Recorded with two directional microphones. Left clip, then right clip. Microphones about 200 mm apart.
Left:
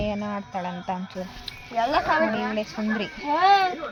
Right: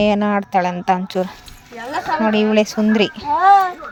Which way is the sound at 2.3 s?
50° right (ahead or behind).